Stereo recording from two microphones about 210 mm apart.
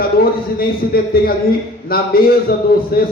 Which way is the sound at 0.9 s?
45° left (ahead or behind).